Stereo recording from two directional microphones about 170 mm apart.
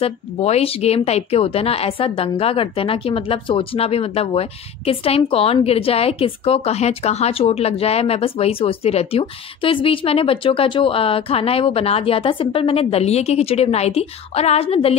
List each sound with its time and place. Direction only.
0.0 s a woman's voice: 35° left (ahead or behind)